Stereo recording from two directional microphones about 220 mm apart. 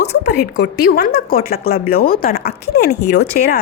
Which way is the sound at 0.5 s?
50° left (ahead or behind).